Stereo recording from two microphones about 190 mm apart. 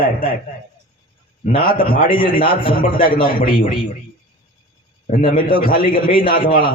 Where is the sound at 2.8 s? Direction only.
50° left (ahead or behind).